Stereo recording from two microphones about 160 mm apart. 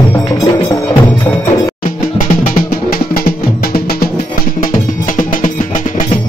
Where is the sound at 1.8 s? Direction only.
50° left (ahead or behind).